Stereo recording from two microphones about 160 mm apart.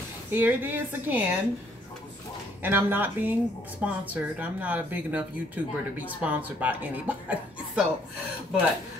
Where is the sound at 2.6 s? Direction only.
15° right (ahead or behind).